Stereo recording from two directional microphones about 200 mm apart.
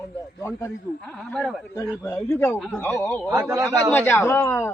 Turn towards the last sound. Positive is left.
turn(degrees=10)  # may be behind; listen again after turning